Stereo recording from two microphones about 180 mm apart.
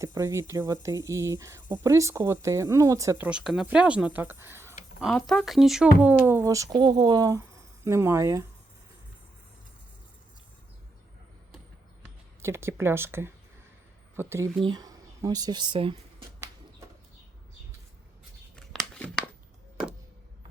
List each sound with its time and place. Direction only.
0.0 s speech: 15° right (ahead or behind)
3.2 s speech: 5° right (ahead or behind)
4.9 s speech: centre (ahead or behind); by 8.4 s 15° right (ahead or behind)
12.4 s speech: 15° right (ahead or behind)
18.5 s a sound: 5° left (ahead or behind)